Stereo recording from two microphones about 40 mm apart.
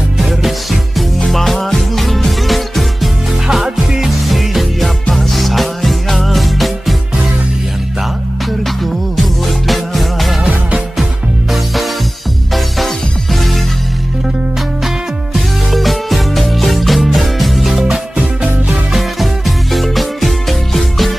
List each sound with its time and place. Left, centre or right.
0.2 s music: centre
3.4 s music: centre
9.1 s music: centre
11.5 s music: centre
15.3 s music: centre
17.8 s music: right
18.9 s music: centre